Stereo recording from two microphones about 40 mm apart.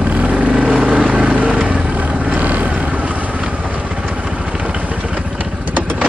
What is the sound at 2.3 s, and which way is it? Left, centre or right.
Vehicle, right.